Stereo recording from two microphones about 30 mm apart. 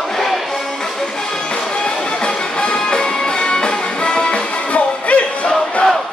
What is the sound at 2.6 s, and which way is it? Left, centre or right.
Music, left.